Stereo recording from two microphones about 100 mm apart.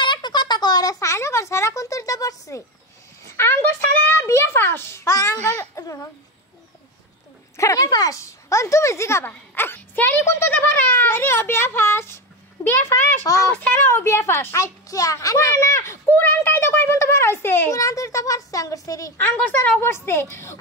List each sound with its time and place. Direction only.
0.0 s a sound: 50° left (ahead or behind)
4.0 s a child's voice: 25° left (ahead or behind)
7.5 s a woman's voice: 35° left (ahead or behind)
19.1 s speech: 20° left (ahead or behind)